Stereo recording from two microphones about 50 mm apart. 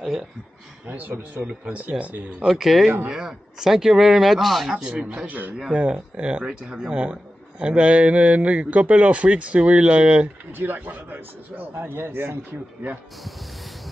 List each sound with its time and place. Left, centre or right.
0.8 s a man's voice: right
2.4 s a man's voice: centre; by 10.3 s right
10.6 s a man's voice: right